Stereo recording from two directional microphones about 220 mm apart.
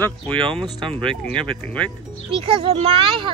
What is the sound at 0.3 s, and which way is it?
Speech, 20° right (ahead or behind).